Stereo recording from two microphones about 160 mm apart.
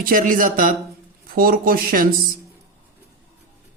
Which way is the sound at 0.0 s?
60° right (ahead or behind).